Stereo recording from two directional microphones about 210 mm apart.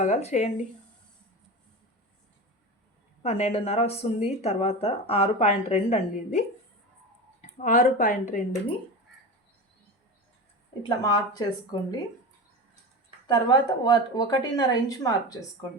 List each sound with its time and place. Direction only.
0.0 s speech: 35° left (ahead or behind)
3.2 s speech: 30° left (ahead or behind)
7.6 s speech: 35° left (ahead or behind)
10.8 s speech: 20° left (ahead or behind)
13.2 s speech: 20° left (ahead or behind)